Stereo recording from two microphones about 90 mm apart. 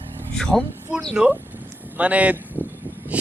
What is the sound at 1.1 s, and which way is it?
Speech, 15° right (ahead or behind).